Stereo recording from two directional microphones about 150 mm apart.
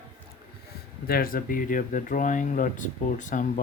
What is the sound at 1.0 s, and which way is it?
Speech, 80° left.